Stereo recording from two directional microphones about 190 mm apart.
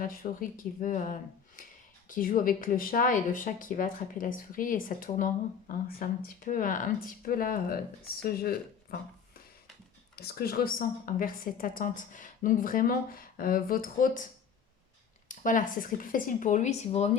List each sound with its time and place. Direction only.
0.0 s speech: 50° left (ahead or behind)
10.2 s speech: 55° left (ahead or behind)
15.3 s speech: 45° left (ahead or behind)